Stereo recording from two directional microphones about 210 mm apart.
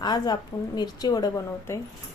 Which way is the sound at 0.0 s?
20° left (ahead or behind).